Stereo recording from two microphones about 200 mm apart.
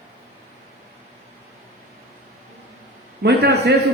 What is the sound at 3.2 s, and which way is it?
Speech, 55° right (ahead or behind).